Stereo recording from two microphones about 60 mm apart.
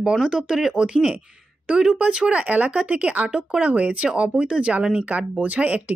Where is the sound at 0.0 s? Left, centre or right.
Centre.